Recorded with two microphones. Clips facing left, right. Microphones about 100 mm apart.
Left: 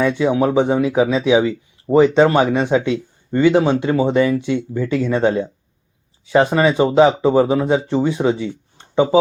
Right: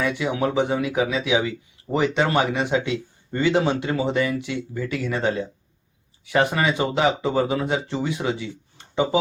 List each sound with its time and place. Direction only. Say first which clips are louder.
0.2 s speech: left 7 dB; 25° left (ahead or behind)
2.0 s speech: left 8 dB; 15° left (ahead or behind)